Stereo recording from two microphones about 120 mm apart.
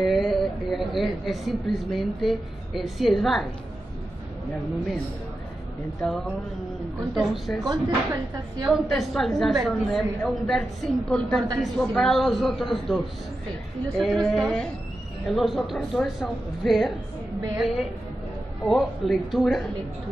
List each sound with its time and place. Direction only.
0.0 s a woman's voice: centre (ahead or behind)
5.9 s a woman's voice: 5° left (ahead or behind)
7.6 s speech: 35° right (ahead or behind)
8.6 s a woman's voice: centre (ahead or behind)